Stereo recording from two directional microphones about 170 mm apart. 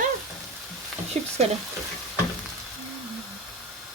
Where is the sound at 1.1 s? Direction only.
40° right (ahead or behind).